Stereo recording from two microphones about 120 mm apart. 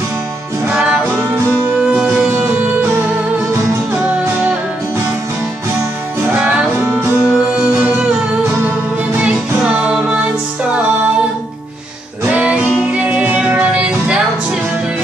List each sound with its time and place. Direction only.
1.8 s music: 5° right (ahead or behind)
6.3 s music: 10° right (ahead or behind)
9.8 s music: 10° right (ahead or behind)
12.3 s music: 10° right (ahead or behind)